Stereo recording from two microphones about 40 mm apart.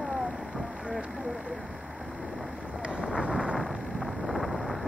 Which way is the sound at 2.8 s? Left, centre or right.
Right.